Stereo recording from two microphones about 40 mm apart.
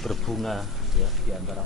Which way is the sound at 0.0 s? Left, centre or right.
Centre.